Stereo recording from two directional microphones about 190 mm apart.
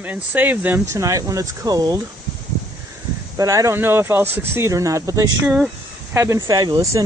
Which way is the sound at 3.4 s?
15° right (ahead or behind).